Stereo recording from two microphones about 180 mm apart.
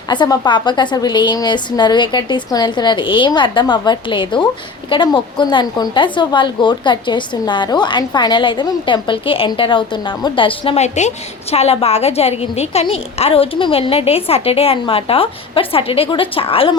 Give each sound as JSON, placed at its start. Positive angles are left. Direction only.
{"t": 0.1, "sound": "a woman's voice", "side_deg": 25}